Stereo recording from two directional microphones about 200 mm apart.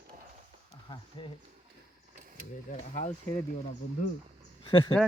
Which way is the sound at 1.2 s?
25° left (ahead or behind).